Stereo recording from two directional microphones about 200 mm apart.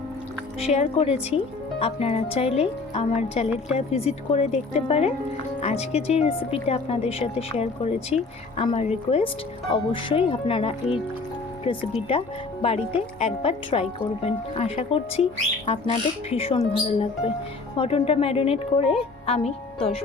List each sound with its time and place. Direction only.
0.6 s a woman's voice: 35° left (ahead or behind)